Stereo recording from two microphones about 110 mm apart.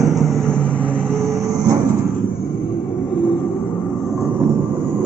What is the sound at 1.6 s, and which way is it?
Vehicle, 35° right (ahead or behind).